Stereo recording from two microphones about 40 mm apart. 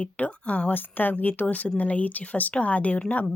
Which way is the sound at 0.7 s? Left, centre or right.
Left.